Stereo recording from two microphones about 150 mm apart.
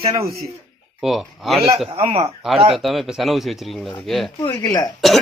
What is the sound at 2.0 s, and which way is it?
Speech, 40° right (ahead or behind).